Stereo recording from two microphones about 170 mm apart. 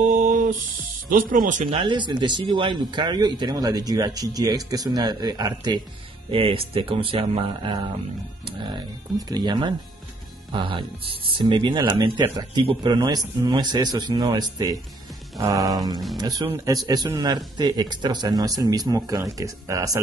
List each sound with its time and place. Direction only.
0.0 s music: 50° right (ahead or behind)
1.1 s speech: 55° right (ahead or behind)
1.7 s speech: 30° right (ahead or behind)
9.3 s speech: 25° right (ahead or behind)